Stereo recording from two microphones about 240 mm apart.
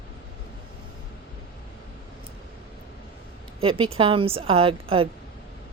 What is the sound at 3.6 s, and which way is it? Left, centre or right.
Speech, right.